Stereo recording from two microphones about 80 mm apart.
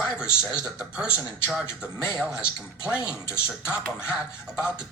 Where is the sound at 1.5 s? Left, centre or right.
Centre.